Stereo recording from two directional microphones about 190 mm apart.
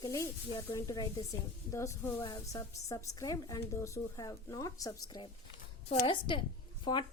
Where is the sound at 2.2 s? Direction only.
25° left (ahead or behind).